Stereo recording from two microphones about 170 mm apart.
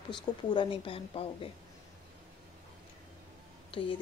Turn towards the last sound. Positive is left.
turn(degrees=30)  # may be behind; listen again after turning